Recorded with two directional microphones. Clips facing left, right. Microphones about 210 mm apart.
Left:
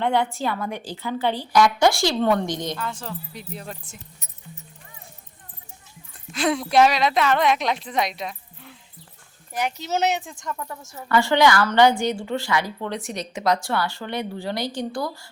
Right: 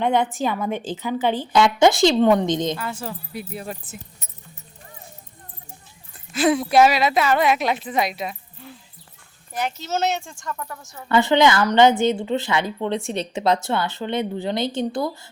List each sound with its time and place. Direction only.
0.0 s a woman's voice: 20° right (ahead or behind)
2.7 s speech: 5° right (ahead or behind)
6.3 s a woman's voice: 5° right (ahead or behind)
9.6 s speech: 15° left (ahead or behind)
11.1 s a woman's voice: 20° right (ahead or behind)